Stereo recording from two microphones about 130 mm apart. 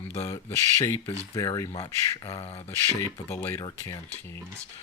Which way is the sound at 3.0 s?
20° left (ahead or behind).